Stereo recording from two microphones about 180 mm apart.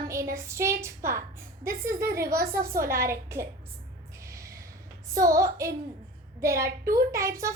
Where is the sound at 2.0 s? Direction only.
60° right (ahead or behind).